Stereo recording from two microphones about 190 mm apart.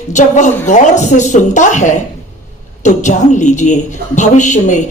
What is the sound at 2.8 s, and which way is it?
A woman's voice, 40° left (ahead or behind).